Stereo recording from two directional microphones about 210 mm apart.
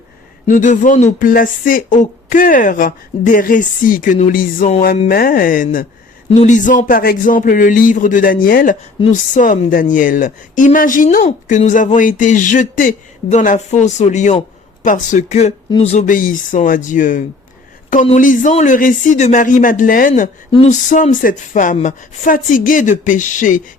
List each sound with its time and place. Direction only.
0.4 s speech: 40° left (ahead or behind)